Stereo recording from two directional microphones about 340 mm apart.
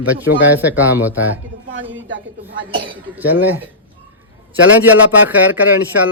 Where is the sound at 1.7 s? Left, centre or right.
Right.